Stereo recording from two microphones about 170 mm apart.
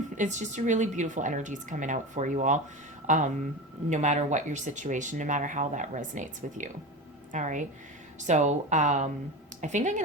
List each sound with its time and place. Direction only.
0.2 s speech: 45° right (ahead or behind)